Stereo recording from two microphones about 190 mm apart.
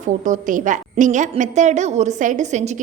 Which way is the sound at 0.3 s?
40° right (ahead or behind).